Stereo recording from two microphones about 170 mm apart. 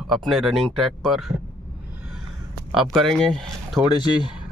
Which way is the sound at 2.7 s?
Centre (ahead or behind).